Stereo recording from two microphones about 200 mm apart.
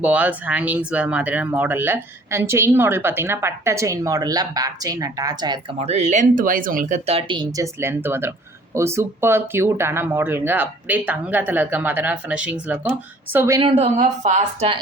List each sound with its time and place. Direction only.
0.0 s speech: 5° right (ahead or behind)
5.8 s speech: 35° right (ahead or behind); by 13.6 s 15° right (ahead or behind)
13.6 s speech: 30° right (ahead or behind)